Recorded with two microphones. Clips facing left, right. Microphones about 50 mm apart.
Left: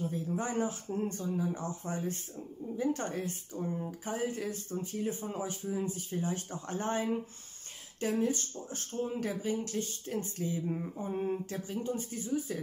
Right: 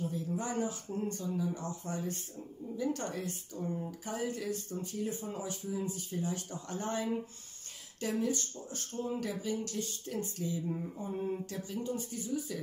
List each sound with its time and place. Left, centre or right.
0.1 s speech: left